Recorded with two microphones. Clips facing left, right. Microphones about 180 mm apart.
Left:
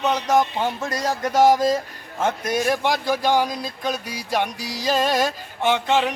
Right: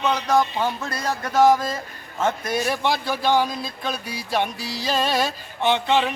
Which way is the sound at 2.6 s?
15° left (ahead or behind).